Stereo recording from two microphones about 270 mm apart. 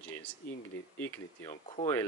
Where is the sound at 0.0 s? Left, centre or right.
Centre.